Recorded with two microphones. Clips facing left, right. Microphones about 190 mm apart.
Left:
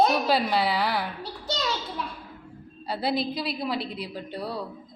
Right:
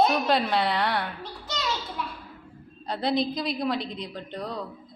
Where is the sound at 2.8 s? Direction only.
5° left (ahead or behind).